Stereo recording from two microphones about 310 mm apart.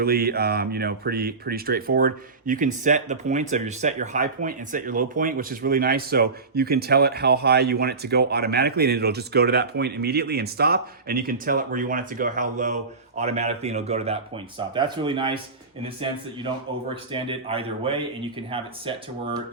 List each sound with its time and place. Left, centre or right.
0.0 s speech: right